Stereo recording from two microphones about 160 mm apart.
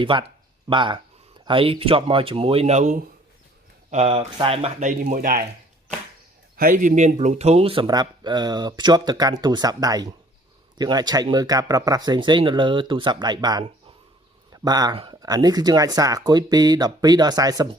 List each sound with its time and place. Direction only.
0.0 s speech: 30° right (ahead or behind)
4.9 s speech: 55° right (ahead or behind)
6.6 s speech: 60° right (ahead or behind); by 17.7 s 25° right (ahead or behind)